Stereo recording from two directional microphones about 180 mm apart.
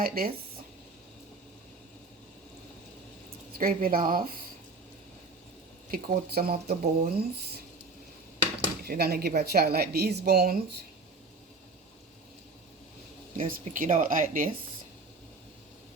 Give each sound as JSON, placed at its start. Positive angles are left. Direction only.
{"t": 0.0, "sound": "a woman's voice", "side_deg": -55}
{"t": 3.6, "sound": "speech", "side_deg": -50}
{"t": 5.9, "sound": "a woman's voice", "side_deg": -55}
{"t": 8.8, "sound": "a woman's voice", "side_deg": -60}
{"t": 13.3, "sound": "speech", "side_deg": -45}